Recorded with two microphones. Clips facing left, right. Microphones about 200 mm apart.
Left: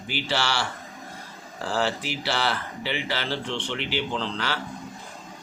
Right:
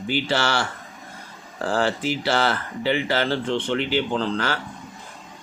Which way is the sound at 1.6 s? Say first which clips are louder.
Right 4 dB; 50° right (ahead or behind).